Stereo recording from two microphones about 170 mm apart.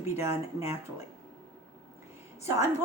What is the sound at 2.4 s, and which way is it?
Speech, 20° right (ahead or behind).